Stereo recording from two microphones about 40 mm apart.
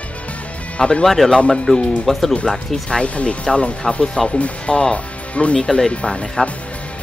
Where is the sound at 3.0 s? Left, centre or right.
Left.